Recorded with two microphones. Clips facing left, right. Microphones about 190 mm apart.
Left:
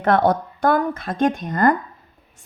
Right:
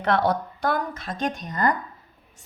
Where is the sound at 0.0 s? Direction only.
50° left (ahead or behind).